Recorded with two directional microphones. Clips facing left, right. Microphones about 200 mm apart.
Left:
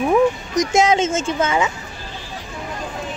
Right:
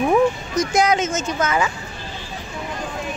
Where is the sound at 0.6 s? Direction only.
25° left (ahead or behind).